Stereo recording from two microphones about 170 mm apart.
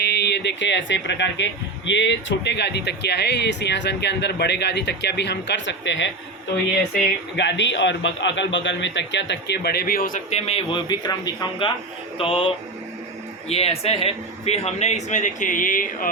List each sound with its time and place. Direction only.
0.0 s speech: 80° left; by 10.8 s 35° left (ahead or behind)
10.8 s a man's voice: 25° left (ahead or behind); by 16.0 s 55° left (ahead or behind)